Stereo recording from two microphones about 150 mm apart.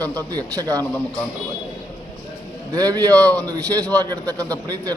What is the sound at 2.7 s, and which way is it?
A man's voice, 25° right (ahead or behind).